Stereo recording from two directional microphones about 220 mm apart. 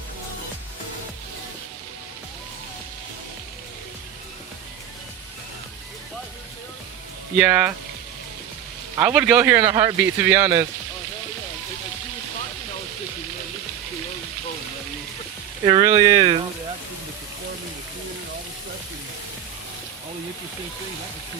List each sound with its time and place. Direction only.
7.3 s speech: 5° right (ahead or behind)
9.0 s speech: 5° right (ahead or behind)
15.6 s speech: 20° right (ahead or behind)